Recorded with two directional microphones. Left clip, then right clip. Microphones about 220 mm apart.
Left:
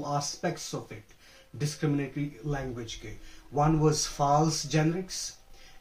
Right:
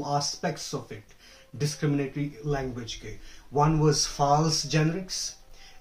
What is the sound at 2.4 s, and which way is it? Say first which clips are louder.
Speech: right 7 dB; 20° right (ahead or behind).